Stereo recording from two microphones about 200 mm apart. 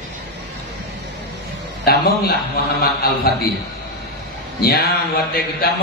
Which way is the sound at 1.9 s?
50° left (ahead or behind).